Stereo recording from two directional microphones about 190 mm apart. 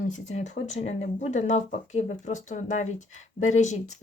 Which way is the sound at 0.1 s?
40° left (ahead or behind).